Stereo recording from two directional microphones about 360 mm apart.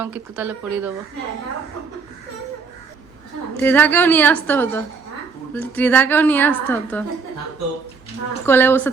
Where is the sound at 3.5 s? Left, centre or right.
Centre.